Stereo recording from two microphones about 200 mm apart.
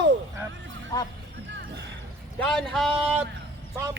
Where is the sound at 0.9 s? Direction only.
20° left (ahead or behind).